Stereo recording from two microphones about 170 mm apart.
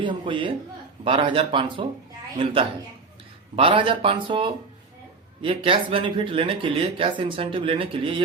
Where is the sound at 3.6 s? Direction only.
30° right (ahead or behind).